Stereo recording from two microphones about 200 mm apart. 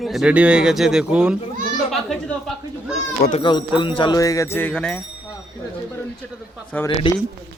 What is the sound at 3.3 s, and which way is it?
Speech, 25° left (ahead or behind).